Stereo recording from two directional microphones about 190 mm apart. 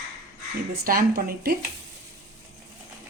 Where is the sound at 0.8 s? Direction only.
50° right (ahead or behind).